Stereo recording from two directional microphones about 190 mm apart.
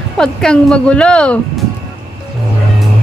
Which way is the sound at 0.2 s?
5° left (ahead or behind).